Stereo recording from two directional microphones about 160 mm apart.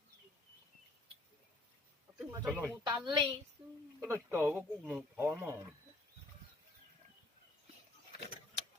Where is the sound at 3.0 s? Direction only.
30° right (ahead or behind).